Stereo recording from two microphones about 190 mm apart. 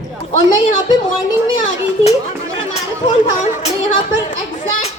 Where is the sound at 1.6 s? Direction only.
35° left (ahead or behind).